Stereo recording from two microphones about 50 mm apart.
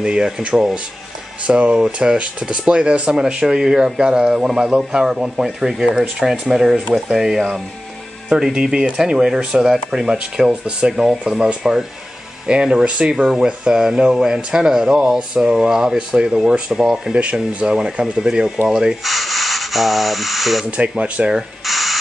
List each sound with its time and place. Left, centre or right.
0.0 s speech: centre
17.1 s speech: right
19.0 s speech: centre
20.9 s speech: right
21.6 s a sound: centre